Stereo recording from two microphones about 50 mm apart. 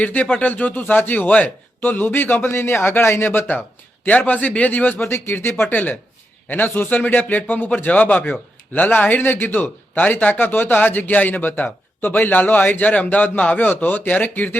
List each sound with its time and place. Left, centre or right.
0.0 s speech: left
4.3 s speech: left
5.0 s speech: left
5.6 s a man's voice: left